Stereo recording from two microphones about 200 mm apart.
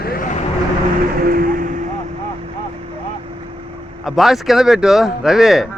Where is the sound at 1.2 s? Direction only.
45° right (ahead or behind).